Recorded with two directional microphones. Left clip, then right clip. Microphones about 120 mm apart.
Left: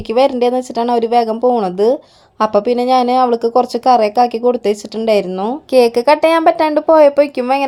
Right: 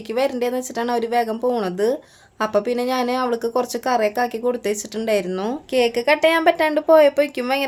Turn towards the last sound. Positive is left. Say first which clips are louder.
# left 5 dB
turn(degrees=35)  # may be behind; listen again after turning